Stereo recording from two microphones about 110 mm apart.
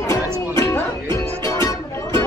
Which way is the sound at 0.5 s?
25° left (ahead or behind).